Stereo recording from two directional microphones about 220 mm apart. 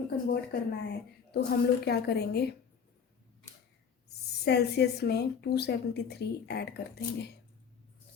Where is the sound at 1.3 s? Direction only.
50° left (ahead or behind).